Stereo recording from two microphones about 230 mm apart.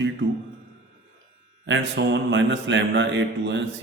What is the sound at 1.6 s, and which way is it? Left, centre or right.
Speech, right.